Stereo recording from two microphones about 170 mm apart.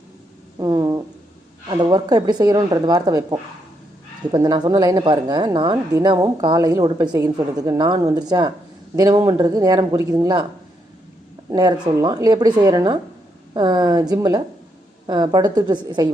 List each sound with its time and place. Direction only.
0.6 s a sound: 20° right (ahead or behind)
1.6 s a woman's voice: 25° right (ahead or behind)
11.4 s a woman's voice: 20° right (ahead or behind)